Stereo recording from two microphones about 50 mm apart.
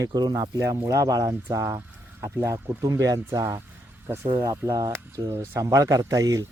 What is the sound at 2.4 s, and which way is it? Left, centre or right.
Speech, right.